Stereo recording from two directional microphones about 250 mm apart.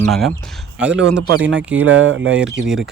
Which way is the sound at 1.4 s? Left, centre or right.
Right.